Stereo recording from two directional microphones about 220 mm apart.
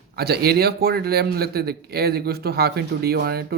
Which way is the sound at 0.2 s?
45° right (ahead or behind).